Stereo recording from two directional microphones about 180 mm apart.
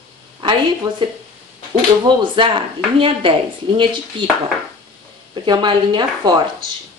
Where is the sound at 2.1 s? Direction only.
25° right (ahead or behind).